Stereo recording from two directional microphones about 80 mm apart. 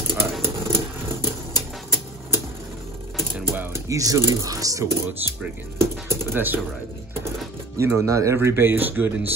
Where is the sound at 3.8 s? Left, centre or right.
Right.